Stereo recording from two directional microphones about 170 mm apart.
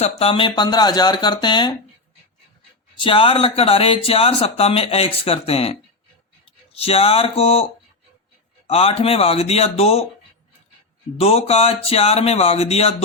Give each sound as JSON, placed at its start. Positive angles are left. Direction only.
{"t": 0.0, "sound": "speech", "side_deg": 35}
{"t": 3.0, "sound": "speech", "side_deg": 30}
{"t": 6.7, "sound": "speech", "side_deg": 35}
{"t": 11.2, "sound": "speech", "side_deg": 35}